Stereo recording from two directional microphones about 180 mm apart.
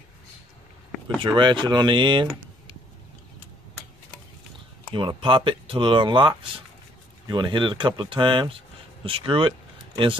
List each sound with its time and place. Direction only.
1.2 s speech: 25° right (ahead or behind)
4.9 s speech: 30° right (ahead or behind)